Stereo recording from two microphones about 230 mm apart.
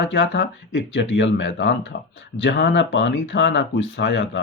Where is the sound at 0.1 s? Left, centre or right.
Left.